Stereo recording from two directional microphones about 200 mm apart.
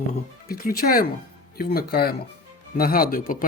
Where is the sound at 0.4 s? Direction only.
45° left (ahead or behind).